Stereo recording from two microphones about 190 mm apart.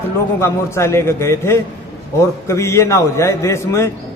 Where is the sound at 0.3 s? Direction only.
15° left (ahead or behind).